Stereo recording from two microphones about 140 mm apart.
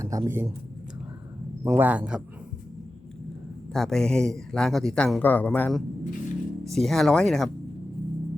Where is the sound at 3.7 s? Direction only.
5° left (ahead or behind).